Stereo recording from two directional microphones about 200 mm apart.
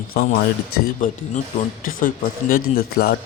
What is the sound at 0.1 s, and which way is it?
A man's voice, 45° left (ahead or behind).